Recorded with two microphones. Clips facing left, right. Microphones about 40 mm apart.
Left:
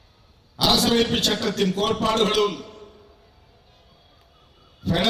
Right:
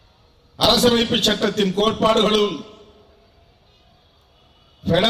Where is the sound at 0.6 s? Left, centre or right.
Right.